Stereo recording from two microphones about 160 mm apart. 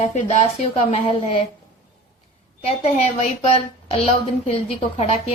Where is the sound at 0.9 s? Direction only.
35° left (ahead or behind).